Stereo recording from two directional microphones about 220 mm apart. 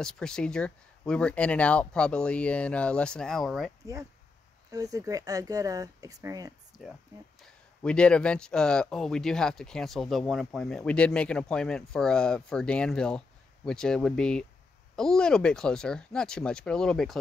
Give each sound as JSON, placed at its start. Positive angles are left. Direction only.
{"t": 0.0, "sound": "speech", "side_deg": 5}
{"t": 4.6, "sound": "speech", "side_deg": -15}
{"t": 6.8, "sound": "speech", "side_deg": 0}